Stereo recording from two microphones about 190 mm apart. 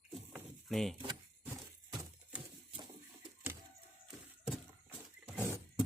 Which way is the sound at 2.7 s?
25° right (ahead or behind).